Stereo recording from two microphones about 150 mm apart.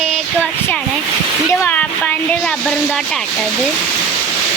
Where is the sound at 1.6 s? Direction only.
10° left (ahead or behind).